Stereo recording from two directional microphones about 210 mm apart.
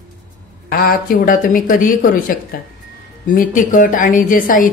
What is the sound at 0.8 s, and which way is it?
Speech, 40° left (ahead or behind).